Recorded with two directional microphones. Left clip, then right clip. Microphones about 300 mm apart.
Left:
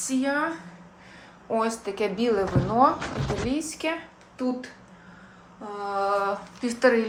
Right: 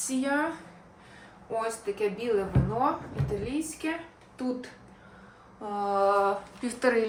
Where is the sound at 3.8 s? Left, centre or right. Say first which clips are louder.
Left 5 dB; centre.